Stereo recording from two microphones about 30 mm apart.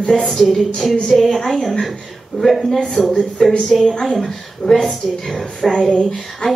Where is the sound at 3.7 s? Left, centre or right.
Centre.